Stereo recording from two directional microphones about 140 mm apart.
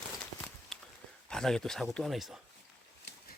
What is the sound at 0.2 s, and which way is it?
Walk, 5° left (ahead or behind).